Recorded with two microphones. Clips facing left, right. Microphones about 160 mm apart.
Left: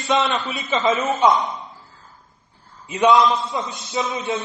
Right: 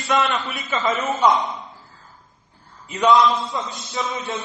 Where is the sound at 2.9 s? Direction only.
25° left (ahead or behind).